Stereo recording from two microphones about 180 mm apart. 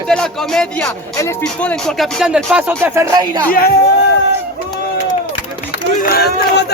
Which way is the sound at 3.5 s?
55° left (ahead or behind).